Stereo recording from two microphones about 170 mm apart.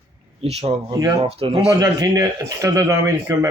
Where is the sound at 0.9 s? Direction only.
20° right (ahead or behind).